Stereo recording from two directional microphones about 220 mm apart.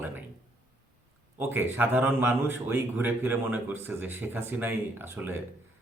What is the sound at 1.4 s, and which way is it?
Speech, 10° right (ahead or behind).